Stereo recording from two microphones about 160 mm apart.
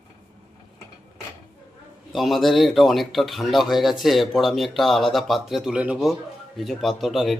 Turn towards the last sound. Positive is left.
turn(degrees=0)  # may be behind; listen again after turning